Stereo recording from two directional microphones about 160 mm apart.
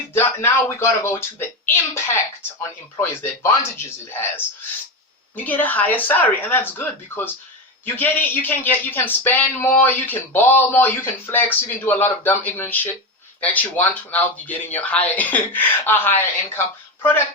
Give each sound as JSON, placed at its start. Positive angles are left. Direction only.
{"t": 0.1, "sound": "speech", "side_deg": 15}